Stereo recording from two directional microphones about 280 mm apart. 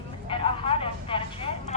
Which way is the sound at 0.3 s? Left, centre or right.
Centre.